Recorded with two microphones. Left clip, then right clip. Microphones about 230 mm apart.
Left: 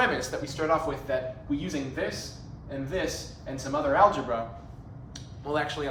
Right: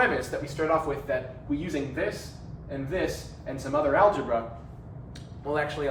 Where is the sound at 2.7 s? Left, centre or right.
Centre.